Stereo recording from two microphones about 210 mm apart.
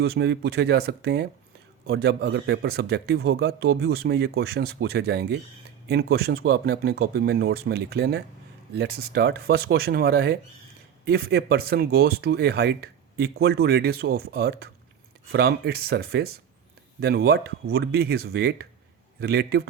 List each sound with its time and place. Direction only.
0.0 s speech: 50° right (ahead or behind)